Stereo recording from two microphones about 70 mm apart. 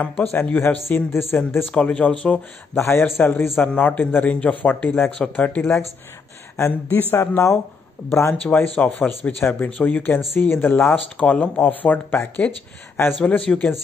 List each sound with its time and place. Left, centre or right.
0.2 s speech: left
1.7 s speech: centre
2.7 s speech: left
3.0 s speech: left
3.6 s speech: centre
8.5 s speech: left
11.1 s speech: centre
11.6 s speech: left
13.4 s speech: centre